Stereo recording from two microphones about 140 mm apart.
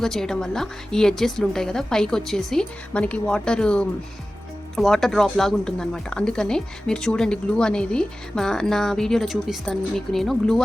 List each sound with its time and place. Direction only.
0.0 s speech: 5° left (ahead or behind)